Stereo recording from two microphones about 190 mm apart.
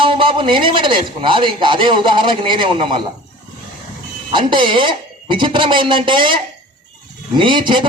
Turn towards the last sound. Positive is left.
turn(degrees=-25)  # may be behind; listen again after turning